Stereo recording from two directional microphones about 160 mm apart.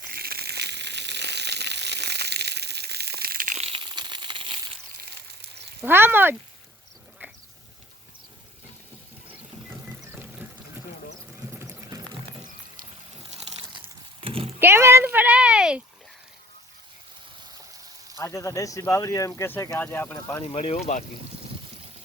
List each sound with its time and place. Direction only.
0.1 s crushing: 70° right (ahead or behind)
3.6 s crumpling: 35° right (ahead or behind)
5.0 s a sound: 90° right
5.8 s speech: 15° right (ahead or behind)
7.2 s vehicle: 10° right (ahead or behind)
9.6 s music: 15° right (ahead or behind)
13.6 s a sound: 30° right (ahead or behind)
14.6 s a sound: 15° right (ahead or behind)
18.2 s speech: 20° left (ahead or behind)
20.4 s speech: 40° left (ahead or behind)